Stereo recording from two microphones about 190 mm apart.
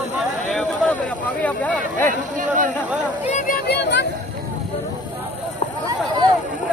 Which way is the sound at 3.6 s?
60° left (ahead or behind).